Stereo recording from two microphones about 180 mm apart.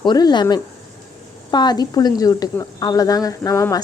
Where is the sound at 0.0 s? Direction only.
25° left (ahead or behind).